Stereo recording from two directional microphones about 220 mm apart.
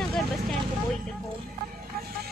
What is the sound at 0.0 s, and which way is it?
Vehicle, centre (ahead or behind).